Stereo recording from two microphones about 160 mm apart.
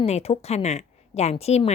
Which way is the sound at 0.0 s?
40° left (ahead or behind).